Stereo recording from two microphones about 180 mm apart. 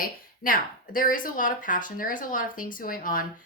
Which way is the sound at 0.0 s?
50° left (ahead or behind).